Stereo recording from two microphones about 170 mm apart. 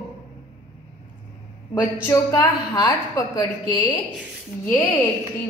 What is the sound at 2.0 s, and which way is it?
A woman's voice, 20° left (ahead or behind).